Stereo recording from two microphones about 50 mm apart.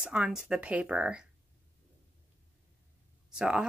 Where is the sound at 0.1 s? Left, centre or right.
Right.